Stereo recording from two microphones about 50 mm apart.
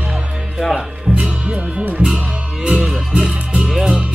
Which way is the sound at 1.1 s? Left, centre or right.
Right.